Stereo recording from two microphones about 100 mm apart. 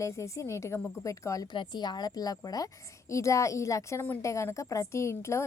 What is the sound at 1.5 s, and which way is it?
A woman's voice, 45° left (ahead or behind).